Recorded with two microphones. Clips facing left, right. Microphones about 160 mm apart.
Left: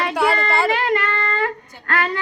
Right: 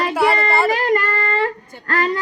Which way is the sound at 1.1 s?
40° right (ahead or behind).